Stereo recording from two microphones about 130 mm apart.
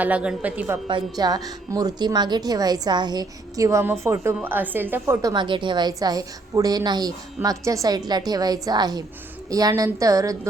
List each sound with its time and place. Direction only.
0.0 s a woman's voice: 10° right (ahead or behind)
0.9 s a woman's voice: 35° right (ahead or behind); by 5.1 s 15° right (ahead or behind)
5.2 s a woman's voice: 35° right (ahead or behind)